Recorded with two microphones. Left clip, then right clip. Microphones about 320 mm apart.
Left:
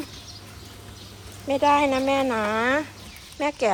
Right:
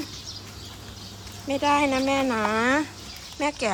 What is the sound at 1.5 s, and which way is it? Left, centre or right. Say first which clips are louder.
Speech: left 3 dB; centre.